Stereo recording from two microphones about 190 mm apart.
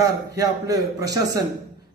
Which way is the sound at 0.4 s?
20° right (ahead or behind).